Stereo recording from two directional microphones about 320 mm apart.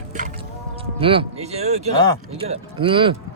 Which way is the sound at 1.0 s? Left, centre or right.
Centre.